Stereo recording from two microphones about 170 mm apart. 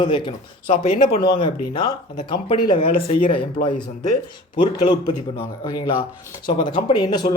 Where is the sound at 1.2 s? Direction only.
25° left (ahead or behind).